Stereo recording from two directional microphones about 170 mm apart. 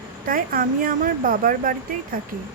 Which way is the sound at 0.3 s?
55° right (ahead or behind).